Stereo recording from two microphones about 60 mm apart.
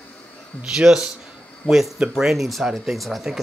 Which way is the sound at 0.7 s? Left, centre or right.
Centre.